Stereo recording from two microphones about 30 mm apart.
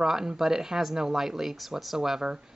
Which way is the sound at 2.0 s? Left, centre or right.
Right.